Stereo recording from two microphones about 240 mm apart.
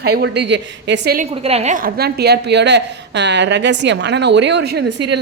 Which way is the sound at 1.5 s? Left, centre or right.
Right.